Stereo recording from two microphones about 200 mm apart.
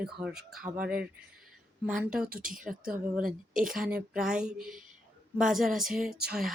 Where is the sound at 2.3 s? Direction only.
45° right (ahead or behind).